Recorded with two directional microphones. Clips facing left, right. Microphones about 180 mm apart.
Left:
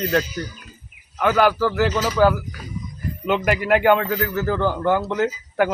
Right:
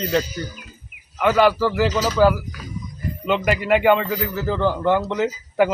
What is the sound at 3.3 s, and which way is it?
Speech, 5° left (ahead or behind).